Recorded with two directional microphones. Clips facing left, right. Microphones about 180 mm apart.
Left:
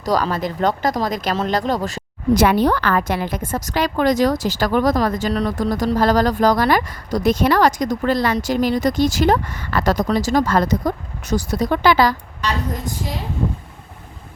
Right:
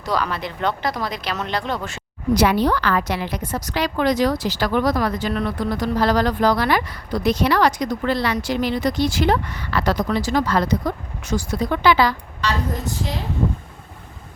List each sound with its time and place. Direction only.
0.0 s a woman's voice: 40° left (ahead or behind)